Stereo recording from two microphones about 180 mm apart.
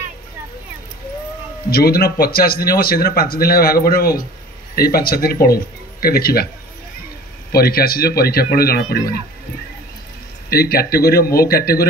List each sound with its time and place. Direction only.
1.7 s speech: 60° left (ahead or behind)
7.5 s speech: 55° left (ahead or behind)
10.5 s speech: 60° left (ahead or behind)